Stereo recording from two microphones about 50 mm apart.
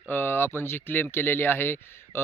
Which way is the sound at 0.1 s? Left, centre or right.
Left.